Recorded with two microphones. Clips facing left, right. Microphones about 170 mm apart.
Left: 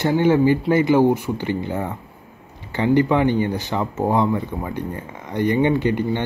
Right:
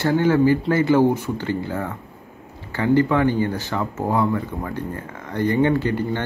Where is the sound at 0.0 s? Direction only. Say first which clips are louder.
Left 1 dB; 20° left (ahead or behind).